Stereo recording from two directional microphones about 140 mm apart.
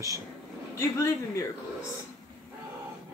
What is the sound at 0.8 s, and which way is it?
Speech, 20° left (ahead or behind).